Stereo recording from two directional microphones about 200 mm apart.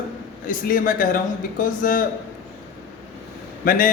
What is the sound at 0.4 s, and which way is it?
A man's voice, 45° left (ahead or behind).